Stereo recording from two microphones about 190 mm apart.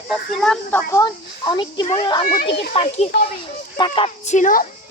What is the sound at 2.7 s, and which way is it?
Speech, 30° left (ahead or behind).